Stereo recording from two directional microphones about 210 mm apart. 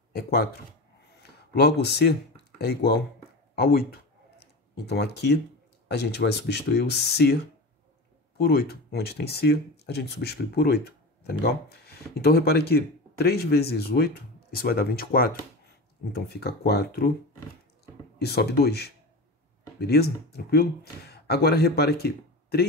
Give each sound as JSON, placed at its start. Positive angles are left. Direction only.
{"t": 0.1, "sound": "speech", "side_deg": 50}
{"t": 8.4, "sound": "speech", "side_deg": 45}
{"t": 18.2, "sound": "speech", "side_deg": 50}